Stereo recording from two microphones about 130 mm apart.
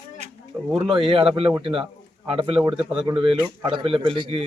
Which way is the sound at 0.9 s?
45° right (ahead or behind).